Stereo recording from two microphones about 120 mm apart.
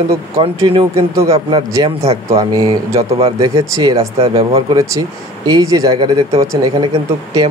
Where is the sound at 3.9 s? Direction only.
55° right (ahead or behind).